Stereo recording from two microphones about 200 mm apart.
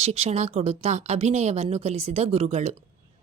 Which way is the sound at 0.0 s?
30° right (ahead or behind).